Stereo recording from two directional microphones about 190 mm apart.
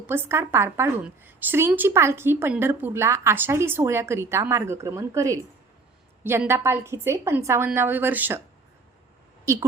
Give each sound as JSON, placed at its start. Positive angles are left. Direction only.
{"t": 0.1, "sound": "a woman's voice", "side_deg": -10}
{"t": 9.5, "sound": "a woman's voice", "side_deg": -15}